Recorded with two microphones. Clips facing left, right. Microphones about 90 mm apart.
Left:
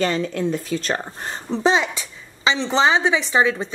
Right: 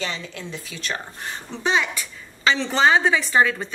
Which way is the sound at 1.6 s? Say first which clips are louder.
Left 3 dB; 25° left (ahead or behind).